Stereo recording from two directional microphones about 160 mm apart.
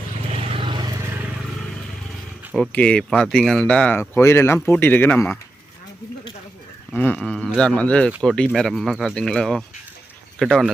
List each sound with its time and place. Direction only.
0.5 s vehicle: 30° right (ahead or behind)
2.6 s speech: 5° left (ahead or behind)
6.9 s speech: 10° left (ahead or behind)